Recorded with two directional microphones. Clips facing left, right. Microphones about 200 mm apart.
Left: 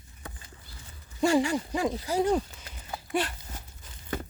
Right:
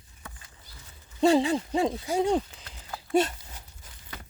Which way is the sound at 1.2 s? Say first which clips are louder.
Right 2 dB; 25° right (ahead or behind).